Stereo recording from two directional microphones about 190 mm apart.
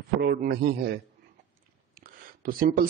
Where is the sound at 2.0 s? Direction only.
50° right (ahead or behind).